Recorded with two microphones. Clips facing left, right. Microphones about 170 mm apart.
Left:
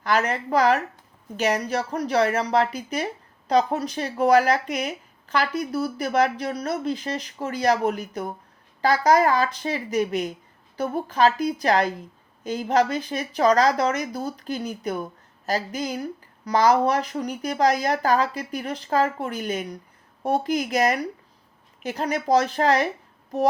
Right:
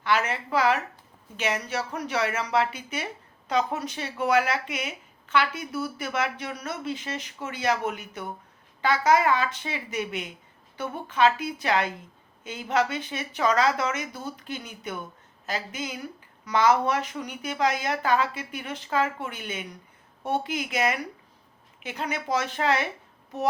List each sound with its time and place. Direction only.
0.0 s speech: 40° left (ahead or behind)